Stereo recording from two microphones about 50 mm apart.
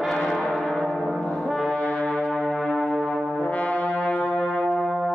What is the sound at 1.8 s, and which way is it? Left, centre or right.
Brass instrument, left.